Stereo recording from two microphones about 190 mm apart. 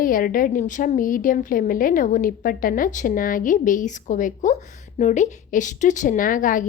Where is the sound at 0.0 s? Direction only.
45° left (ahead or behind).